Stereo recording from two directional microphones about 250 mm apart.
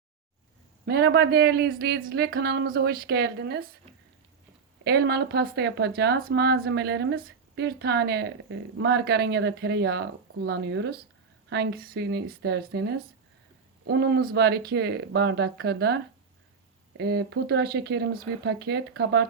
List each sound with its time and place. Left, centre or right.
0.9 s speech: right
4.8 s speech: right
17.0 s speech: right